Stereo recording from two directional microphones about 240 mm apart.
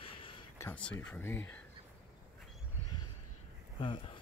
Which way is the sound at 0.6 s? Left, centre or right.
Centre.